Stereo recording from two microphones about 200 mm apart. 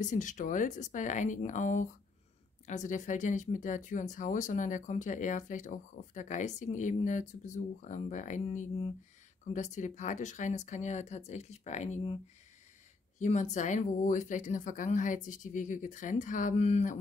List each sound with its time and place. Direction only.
0.0 s speech: 40° left (ahead or behind)
13.2 s speech: 35° left (ahead or behind)